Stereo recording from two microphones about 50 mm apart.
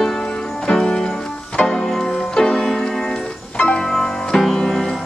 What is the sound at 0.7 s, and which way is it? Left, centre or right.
Music, centre.